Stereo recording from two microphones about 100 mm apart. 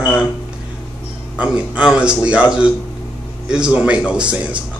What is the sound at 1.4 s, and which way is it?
A man's voice, 10° right (ahead or behind).